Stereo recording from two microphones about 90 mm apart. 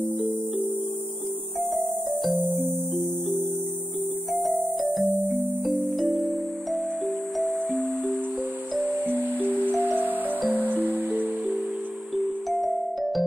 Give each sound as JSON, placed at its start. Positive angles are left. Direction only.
{"t": 1.7, "sound": "music", "side_deg": 0}
{"t": 8.7, "sound": "music", "side_deg": -20}
{"t": 12.2, "sound": "music", "side_deg": 0}